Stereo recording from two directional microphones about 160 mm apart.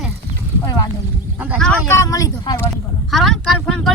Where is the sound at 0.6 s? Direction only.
25° left (ahead or behind).